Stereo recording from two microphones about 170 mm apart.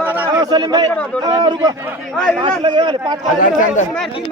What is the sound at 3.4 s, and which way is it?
Speech, 50° left (ahead or behind).